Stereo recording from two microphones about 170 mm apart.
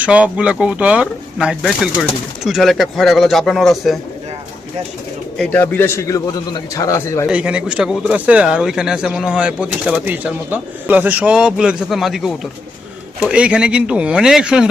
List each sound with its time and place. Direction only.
0.0 s speech: 5° right (ahead or behind)
5.4 s a man's voice: 10° left (ahead or behind)
7.3 s speech: 5° right (ahead or behind)